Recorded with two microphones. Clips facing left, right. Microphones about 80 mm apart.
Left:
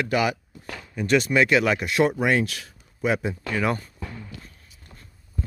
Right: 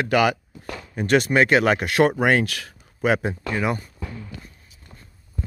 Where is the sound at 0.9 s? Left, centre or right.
Right.